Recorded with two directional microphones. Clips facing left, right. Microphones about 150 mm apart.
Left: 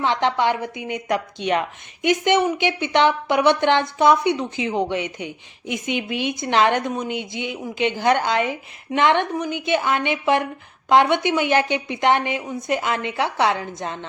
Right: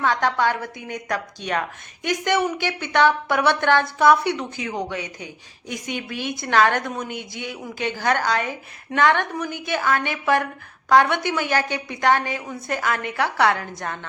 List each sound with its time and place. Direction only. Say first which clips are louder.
0.0 s a woman's voice: left 1 dB; 20° left (ahead or behind)